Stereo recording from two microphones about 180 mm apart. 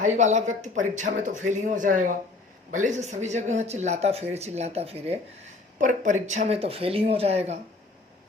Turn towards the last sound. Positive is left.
turn(degrees=-35)  # may be behind; listen again after turning